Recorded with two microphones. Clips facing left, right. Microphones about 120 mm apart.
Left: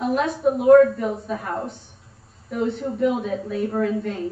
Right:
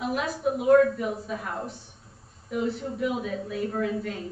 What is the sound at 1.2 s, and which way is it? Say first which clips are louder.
Speech: left 5 dB; centre (ahead or behind).